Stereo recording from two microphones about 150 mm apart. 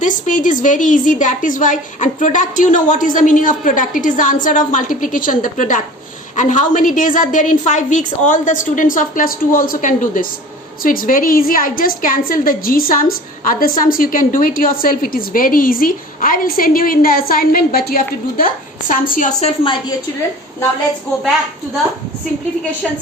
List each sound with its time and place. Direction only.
0.0 s a woman's voice: 60° left (ahead or behind)